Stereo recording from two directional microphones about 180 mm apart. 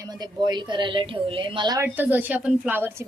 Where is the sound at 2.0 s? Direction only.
10° right (ahead or behind).